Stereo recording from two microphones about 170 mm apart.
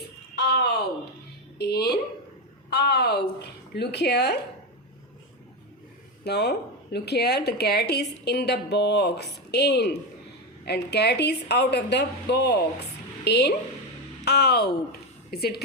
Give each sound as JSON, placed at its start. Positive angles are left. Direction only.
{"t": 0.3, "sound": "a sound", "side_deg": 75}
{"t": 1.5, "sound": "speech", "side_deg": 75}
{"t": 6.2, "sound": "speech", "side_deg": 75}